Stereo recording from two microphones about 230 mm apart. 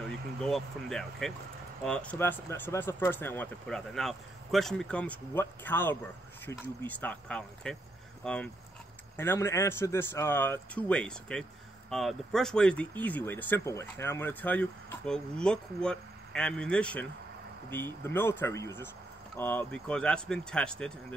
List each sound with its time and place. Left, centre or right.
0.0 s speech: centre